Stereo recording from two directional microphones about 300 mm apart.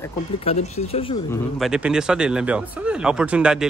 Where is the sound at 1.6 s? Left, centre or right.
Centre.